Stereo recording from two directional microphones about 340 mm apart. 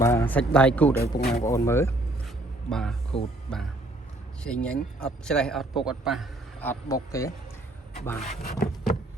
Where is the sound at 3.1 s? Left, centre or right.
Centre.